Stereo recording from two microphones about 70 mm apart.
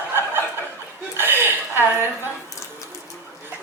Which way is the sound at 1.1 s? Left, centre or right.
Right.